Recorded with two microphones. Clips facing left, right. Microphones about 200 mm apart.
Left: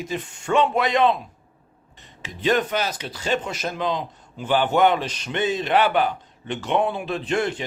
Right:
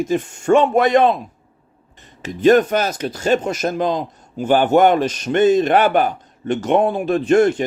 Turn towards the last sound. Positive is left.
turn(degrees=-45)  # may be behind; listen again after turning